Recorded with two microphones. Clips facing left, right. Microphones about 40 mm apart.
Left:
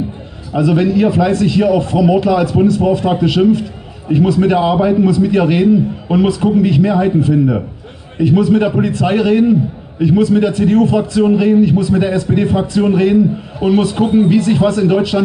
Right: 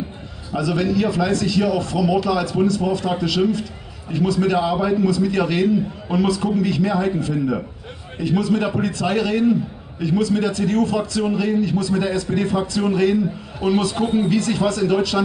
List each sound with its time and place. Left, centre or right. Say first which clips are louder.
0.5 s a man's voice: left 7 dB; left